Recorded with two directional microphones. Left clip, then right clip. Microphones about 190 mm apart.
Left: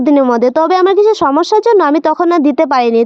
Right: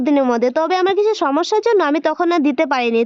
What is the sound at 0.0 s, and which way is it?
Speech, 35° left (ahead or behind).